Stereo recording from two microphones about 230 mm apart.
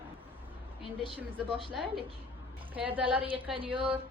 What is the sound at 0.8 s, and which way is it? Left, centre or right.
Speech, left.